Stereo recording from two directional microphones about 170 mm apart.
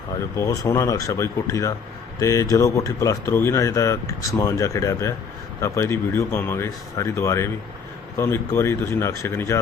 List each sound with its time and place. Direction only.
0.3 s speech: 20° left (ahead or behind)